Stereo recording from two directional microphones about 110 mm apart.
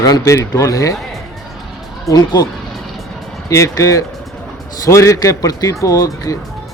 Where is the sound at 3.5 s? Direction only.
30° left (ahead or behind).